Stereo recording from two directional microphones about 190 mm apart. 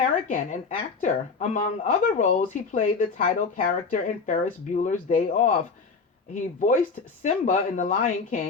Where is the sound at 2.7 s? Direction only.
45° left (ahead or behind).